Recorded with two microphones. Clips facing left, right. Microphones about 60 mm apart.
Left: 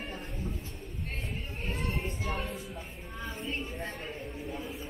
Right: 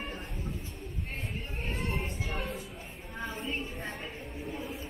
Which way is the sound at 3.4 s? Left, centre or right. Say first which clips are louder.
Even; centre.